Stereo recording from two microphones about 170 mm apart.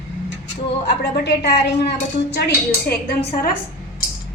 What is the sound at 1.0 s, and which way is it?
A woman's voice, 75° left (ahead or behind).